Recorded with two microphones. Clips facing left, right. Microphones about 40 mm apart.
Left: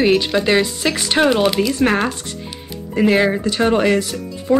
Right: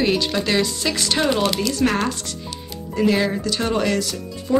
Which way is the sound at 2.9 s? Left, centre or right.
Left.